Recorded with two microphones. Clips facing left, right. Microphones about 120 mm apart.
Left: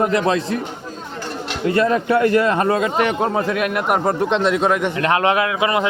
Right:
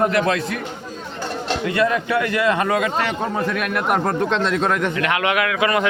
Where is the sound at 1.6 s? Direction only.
35° left (ahead or behind).